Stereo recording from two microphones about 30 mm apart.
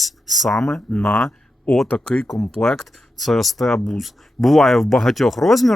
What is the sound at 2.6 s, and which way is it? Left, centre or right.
Speech, left.